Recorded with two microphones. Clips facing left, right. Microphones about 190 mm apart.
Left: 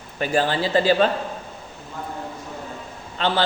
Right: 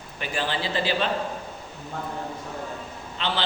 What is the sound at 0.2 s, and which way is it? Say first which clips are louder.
Speech: left 7 dB; 45° left (ahead or behind).